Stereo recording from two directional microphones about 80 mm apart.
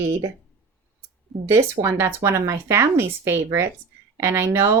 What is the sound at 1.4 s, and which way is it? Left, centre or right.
Speech, right.